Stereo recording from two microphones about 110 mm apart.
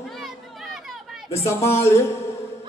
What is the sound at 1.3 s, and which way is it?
Speech, 25° left (ahead or behind).